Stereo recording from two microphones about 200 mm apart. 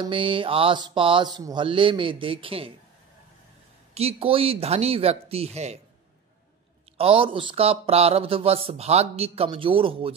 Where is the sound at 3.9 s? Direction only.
30° right (ahead or behind).